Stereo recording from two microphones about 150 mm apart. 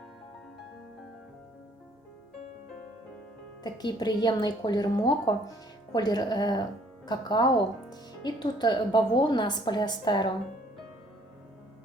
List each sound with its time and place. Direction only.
3.6 s speech: 25° left (ahead or behind)